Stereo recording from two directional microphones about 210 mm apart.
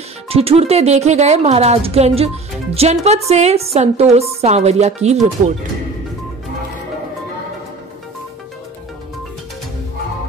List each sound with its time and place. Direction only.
0.3 s speech: 30° right (ahead or behind)